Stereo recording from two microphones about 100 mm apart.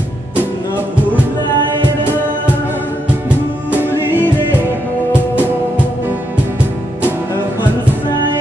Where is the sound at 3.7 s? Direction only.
20° right (ahead or behind).